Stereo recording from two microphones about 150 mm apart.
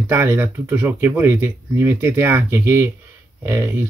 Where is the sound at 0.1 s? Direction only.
15° right (ahead or behind).